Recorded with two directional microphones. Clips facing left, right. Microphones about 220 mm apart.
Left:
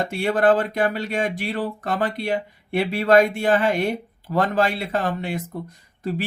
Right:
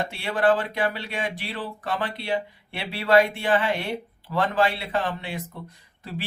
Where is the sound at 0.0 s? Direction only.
45° left (ahead or behind).